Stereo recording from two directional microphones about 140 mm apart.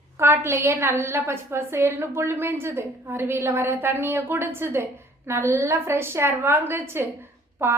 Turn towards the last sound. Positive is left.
turn(degrees=-20)  # may be behind; listen again after turning